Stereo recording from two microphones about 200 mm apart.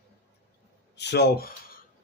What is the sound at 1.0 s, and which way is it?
Speech, 55° left (ahead or behind).